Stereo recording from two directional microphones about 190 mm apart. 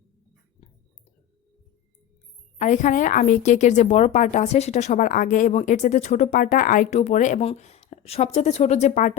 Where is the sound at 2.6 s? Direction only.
40° left (ahead or behind).